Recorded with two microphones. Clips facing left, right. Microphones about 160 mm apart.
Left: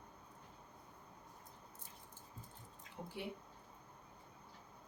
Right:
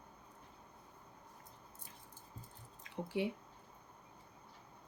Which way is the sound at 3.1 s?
90° right.